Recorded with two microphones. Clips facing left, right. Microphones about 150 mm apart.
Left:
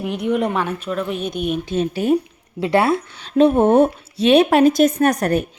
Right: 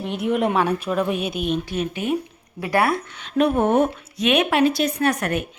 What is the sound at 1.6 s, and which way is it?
Speech, 25° left (ahead or behind).